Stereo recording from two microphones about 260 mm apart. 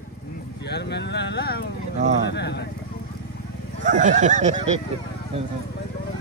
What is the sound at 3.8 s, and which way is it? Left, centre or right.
Speech, right.